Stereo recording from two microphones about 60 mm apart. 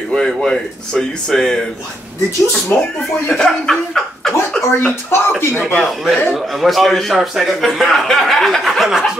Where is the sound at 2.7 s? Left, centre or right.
Left.